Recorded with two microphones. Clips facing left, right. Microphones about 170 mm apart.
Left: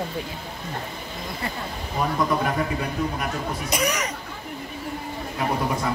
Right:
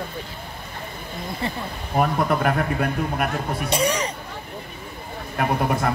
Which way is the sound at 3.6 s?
30° right (ahead or behind).